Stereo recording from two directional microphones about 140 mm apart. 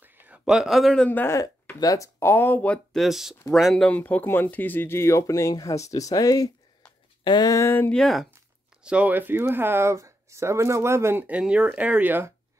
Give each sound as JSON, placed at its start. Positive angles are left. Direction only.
{"t": 0.0, "sound": "speech", "side_deg": -5}
{"t": 1.8, "sound": "speech", "side_deg": 25}
{"t": 7.9, "sound": "speech", "side_deg": 0}
{"t": 8.8, "sound": "speech", "side_deg": -10}